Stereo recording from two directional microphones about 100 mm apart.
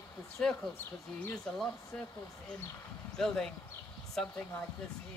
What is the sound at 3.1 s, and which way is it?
Speech, 5° left (ahead or behind).